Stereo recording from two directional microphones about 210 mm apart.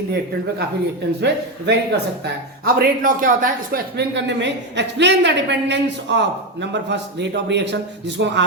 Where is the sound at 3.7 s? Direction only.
55° right (ahead or behind).